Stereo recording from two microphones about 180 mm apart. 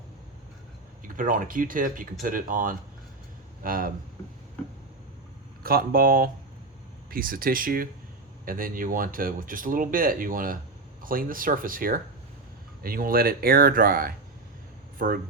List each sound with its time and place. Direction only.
1.0 s speech: 50° right (ahead or behind)
5.6 s speech: 55° right (ahead or behind)